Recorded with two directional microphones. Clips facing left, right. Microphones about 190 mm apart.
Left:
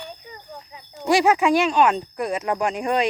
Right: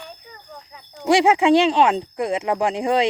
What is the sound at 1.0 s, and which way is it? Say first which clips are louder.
Speech: right 2 dB; 25° right (ahead or behind).